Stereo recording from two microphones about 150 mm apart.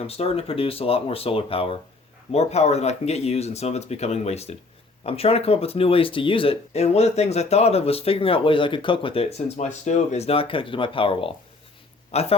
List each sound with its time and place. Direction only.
0.1 s speech: 40° left (ahead or behind)